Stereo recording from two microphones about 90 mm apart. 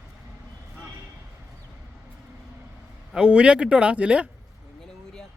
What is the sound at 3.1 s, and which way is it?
Speech, 10° right (ahead or behind).